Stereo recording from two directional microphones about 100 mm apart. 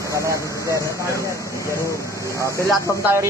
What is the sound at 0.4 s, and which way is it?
Speech, 30° left (ahead or behind).